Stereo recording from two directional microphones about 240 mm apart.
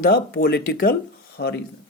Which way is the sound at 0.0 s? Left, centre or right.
Left.